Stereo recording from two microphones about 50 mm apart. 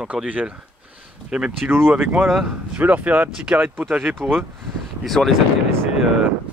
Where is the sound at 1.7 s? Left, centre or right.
Right.